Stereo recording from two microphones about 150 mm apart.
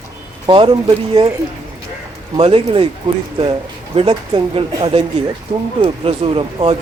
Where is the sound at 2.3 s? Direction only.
35° right (ahead or behind).